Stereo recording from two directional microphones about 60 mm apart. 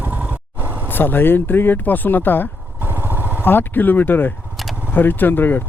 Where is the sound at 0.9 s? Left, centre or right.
Left.